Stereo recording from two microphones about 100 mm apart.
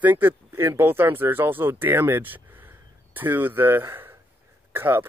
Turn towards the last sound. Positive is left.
turn(degrees=-20)  # may be behind; listen again after turning